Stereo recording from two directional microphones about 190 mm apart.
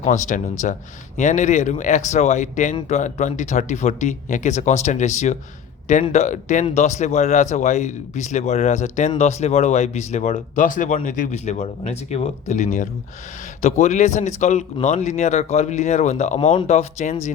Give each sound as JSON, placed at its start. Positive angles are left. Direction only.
{"t": 0.0, "sound": "speech", "side_deg": 40}